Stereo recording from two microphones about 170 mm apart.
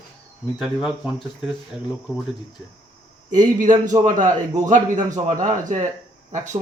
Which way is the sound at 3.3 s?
50° right (ahead or behind).